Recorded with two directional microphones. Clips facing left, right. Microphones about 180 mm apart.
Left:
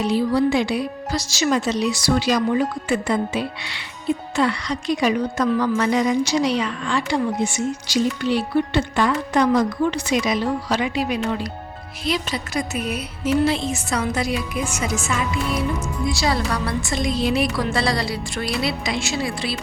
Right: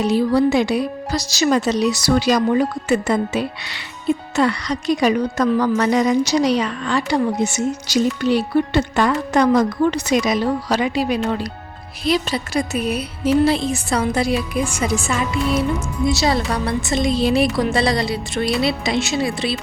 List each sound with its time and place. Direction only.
0.0 s a woman's voice: 45° right (ahead or behind)
17.7 s a woman's voice: 20° right (ahead or behind)